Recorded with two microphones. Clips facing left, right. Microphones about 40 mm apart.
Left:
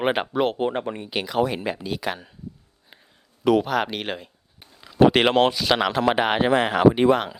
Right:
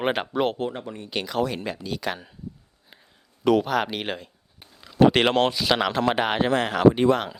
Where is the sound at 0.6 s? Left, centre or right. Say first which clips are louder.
Left 6 dB; left.